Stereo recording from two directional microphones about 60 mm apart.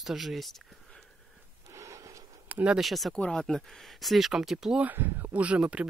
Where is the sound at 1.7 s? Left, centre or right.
Right.